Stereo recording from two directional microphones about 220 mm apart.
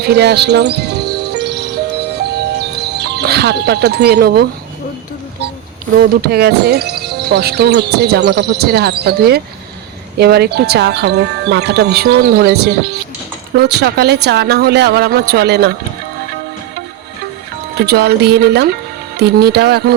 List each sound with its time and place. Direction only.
0.0 s speech: 50° right (ahead or behind)
2.6 s speech: 45° right (ahead or behind)
6.0 s speech: 45° right (ahead or behind)
17.7 s speech: 45° right (ahead or behind)